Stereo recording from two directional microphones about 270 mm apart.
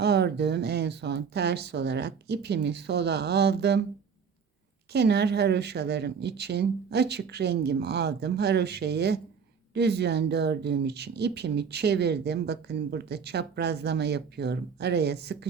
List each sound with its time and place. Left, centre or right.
0.0 s speech: right
4.9 s speech: right